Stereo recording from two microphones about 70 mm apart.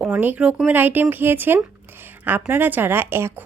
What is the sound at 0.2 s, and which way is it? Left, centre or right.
A woman's voice, right.